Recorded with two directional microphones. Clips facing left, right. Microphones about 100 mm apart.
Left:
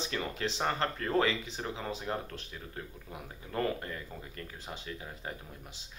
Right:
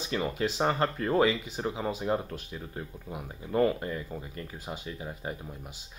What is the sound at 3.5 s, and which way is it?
Speech, 15° right (ahead or behind).